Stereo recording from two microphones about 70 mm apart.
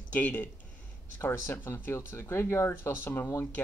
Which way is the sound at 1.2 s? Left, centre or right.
Left.